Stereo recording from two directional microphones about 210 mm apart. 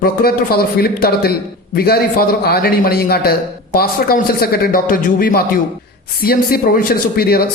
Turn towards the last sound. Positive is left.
turn(degrees=45)  # may be behind; listen again after turning